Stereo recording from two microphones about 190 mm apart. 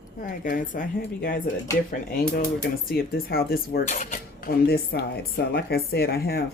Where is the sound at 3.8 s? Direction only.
40° left (ahead or behind); by 6.5 s 55° left (ahead or behind).